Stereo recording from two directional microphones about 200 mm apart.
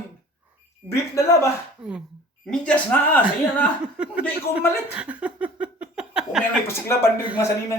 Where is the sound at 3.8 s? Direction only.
5° right (ahead or behind).